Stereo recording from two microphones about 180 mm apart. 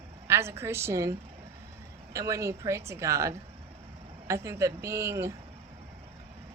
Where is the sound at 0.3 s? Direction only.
15° right (ahead or behind).